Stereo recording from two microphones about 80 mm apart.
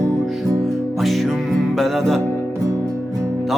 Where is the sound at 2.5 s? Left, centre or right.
Right.